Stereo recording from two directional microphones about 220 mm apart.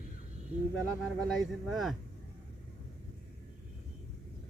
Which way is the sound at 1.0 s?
Centre (ahead or behind).